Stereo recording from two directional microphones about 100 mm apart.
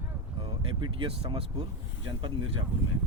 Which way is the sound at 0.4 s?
60° right (ahead or behind).